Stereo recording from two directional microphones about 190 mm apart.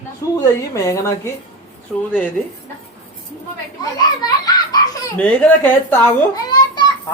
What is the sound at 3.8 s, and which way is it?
Children playing, 20° left (ahead or behind).